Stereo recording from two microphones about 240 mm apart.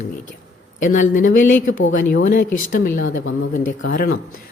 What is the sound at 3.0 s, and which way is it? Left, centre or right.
Speech, left.